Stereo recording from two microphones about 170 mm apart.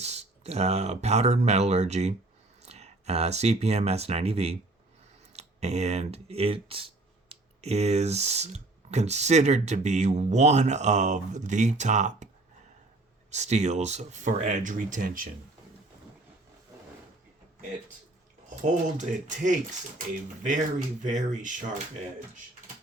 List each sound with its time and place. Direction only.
0.0 s speech: 40° right (ahead or behind)
13.3 s speech: 40° right (ahead or behind)
18.6 s speech: 45° right (ahead or behind)